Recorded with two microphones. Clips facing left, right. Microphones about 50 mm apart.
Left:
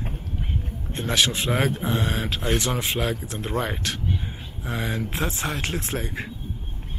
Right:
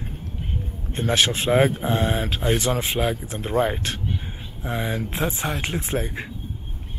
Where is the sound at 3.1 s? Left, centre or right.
Centre.